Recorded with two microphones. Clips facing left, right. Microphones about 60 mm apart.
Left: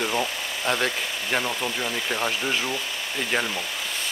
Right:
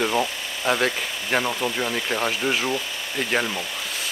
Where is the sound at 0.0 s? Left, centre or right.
Centre.